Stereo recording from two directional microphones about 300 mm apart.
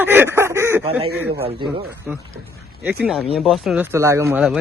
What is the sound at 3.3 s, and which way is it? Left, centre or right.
Speech, centre.